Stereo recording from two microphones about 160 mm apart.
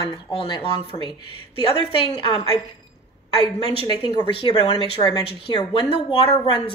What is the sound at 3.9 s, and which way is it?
A woman's voice, 30° left (ahead or behind).